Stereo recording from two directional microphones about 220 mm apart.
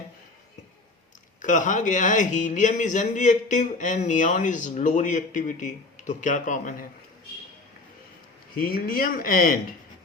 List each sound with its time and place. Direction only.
1.4 s a man's voice: 35° left (ahead or behind)
8.6 s a man's voice: 40° left (ahead or behind)